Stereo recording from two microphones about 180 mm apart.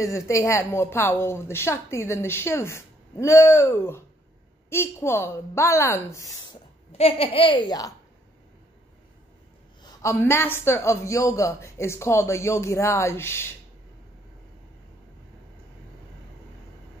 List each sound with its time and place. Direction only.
0.0 s a woman's voice: 15° left (ahead or behind)
9.8 s a woman's voice: 15° left (ahead or behind)